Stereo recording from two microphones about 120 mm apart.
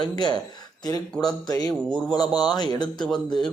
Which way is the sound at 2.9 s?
5° left (ahead or behind).